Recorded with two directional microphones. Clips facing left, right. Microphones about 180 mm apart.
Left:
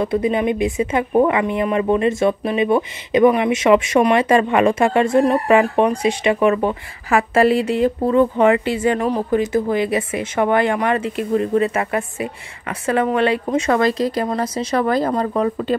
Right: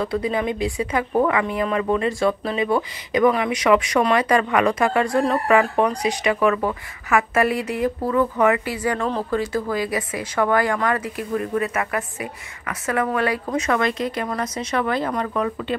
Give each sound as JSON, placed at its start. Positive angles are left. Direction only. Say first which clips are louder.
{"t": 0.0, "sound": "speech", "louder": "left 4 dB", "side_deg": 20}